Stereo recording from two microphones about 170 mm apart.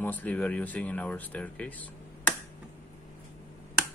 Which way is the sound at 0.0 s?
10° left (ahead or behind).